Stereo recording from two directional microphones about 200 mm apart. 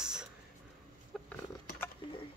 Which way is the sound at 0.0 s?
5° right (ahead or behind).